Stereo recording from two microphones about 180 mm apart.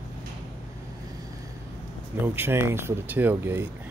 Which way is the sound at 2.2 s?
10° right (ahead or behind).